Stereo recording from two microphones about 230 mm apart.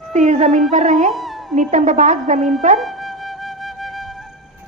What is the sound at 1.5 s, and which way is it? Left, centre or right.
A woman's voice, right.